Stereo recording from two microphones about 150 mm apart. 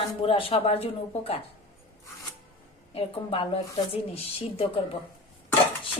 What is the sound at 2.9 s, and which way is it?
Speech, 35° left (ahead or behind).